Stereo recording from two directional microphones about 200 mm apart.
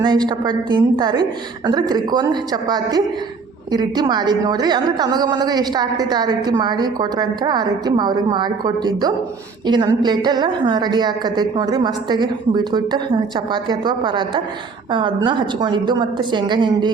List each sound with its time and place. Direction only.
0.0 s a woman's voice: 20° right (ahead or behind)